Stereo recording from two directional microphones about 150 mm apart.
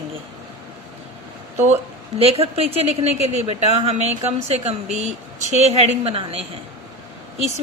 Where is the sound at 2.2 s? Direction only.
40° right (ahead or behind).